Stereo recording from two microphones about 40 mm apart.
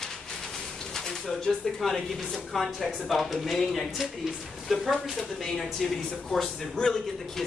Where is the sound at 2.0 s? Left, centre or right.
Centre.